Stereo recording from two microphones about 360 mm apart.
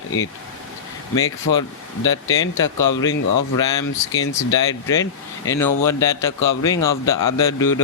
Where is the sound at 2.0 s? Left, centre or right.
Left.